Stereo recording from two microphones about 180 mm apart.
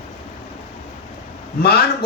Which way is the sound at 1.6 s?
60° left (ahead or behind).